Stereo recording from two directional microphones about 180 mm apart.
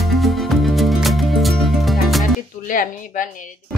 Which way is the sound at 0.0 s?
Centre (ahead or behind).